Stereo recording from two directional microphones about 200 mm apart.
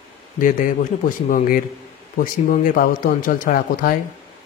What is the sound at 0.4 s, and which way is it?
Speech, 40° left (ahead or behind).